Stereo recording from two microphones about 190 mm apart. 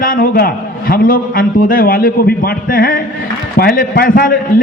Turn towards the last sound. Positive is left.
turn(degrees=50)  # may be behind; listen again after turning